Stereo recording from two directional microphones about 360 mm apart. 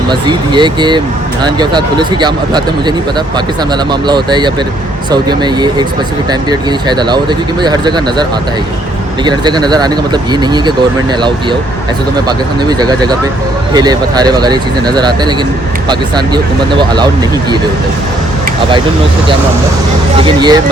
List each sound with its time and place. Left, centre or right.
0.1 s speech: centre
12.6 s speech: centre
20.2 s speech: centre